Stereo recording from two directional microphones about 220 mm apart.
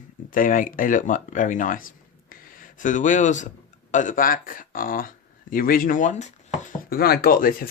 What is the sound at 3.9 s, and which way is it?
Speech, 35° left (ahead or behind).